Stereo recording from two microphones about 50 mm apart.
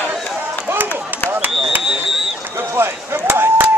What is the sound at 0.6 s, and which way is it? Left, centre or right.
Run, right.